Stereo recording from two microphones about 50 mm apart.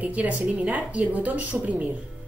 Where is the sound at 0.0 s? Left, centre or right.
Right.